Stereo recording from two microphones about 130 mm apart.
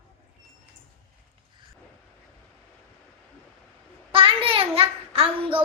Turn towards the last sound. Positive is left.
turn(degrees=-45)  # may be behind; listen again after turning